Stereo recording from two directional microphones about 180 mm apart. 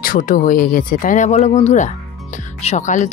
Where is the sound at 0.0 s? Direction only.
50° left (ahead or behind).